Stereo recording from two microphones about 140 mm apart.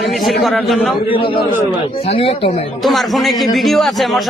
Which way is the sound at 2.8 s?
Centre (ahead or behind).